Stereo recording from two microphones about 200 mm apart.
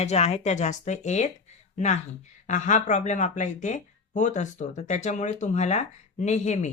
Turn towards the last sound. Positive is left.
turn(degrees=35)  # may be behind; listen again after turning